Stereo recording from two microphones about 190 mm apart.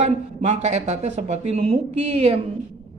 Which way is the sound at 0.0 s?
35° right (ahead or behind).